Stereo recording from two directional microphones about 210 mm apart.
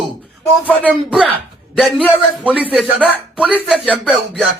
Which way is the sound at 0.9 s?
5° right (ahead or behind).